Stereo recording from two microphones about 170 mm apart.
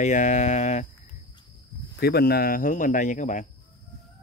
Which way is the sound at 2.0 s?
70° left (ahead or behind).